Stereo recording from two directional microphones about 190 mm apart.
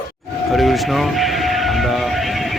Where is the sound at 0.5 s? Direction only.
Centre (ahead or behind).